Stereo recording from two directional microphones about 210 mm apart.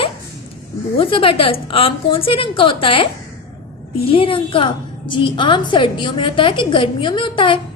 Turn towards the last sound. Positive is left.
turn(degrees=25)  # may be behind; listen again after turning